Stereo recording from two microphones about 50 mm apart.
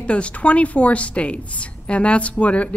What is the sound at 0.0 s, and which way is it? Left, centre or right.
A woman's voice, left.